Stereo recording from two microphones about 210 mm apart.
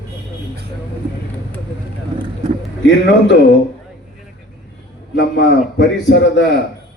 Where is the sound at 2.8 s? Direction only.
60° left (ahead or behind).